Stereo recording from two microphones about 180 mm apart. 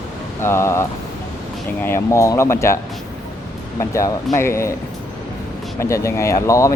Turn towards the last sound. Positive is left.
turn(degrees=15)  # may be behind; listen again after turning